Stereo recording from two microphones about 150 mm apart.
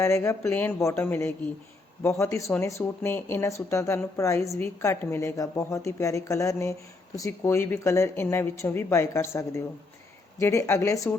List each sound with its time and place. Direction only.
0.0 s a woman's voice: 15° left (ahead or behind)